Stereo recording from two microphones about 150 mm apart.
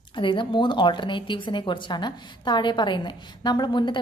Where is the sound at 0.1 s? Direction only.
35° left (ahead or behind).